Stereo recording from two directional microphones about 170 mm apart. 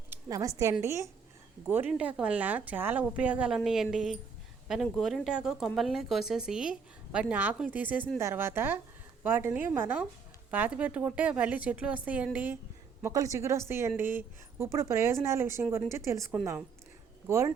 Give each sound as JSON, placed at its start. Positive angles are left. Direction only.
{"t": 0.1, "sound": "a woman's voice", "side_deg": -20}